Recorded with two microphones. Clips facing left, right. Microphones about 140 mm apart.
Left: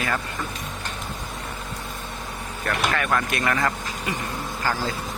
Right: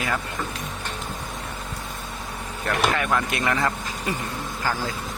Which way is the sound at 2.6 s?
20° right (ahead or behind).